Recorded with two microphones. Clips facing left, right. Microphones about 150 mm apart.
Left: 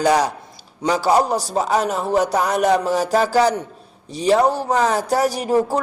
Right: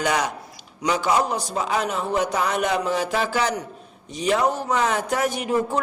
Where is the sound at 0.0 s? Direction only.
35° left (ahead or behind).